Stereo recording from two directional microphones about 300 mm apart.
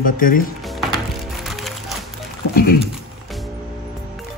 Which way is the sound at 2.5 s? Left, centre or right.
Left.